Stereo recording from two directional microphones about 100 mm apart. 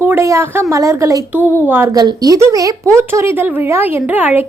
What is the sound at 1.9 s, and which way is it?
Speech, 40° right (ahead or behind).